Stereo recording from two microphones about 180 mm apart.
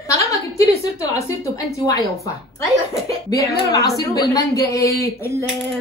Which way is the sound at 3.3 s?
20° left (ahead or behind).